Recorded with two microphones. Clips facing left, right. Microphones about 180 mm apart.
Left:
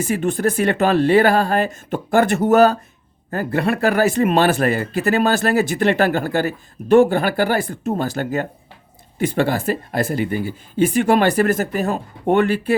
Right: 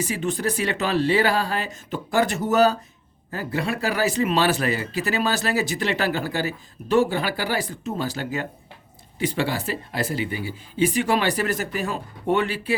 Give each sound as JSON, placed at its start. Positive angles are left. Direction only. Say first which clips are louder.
{"t": 0.0, "sound": "speech", "louder": "left 6 dB", "side_deg": 50}